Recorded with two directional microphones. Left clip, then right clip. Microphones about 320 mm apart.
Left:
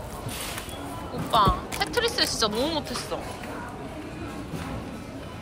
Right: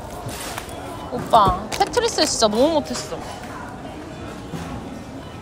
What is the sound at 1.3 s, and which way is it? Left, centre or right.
A woman's voice, centre.